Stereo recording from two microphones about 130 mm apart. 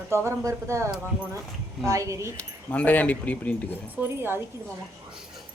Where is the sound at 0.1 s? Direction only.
20° right (ahead or behind).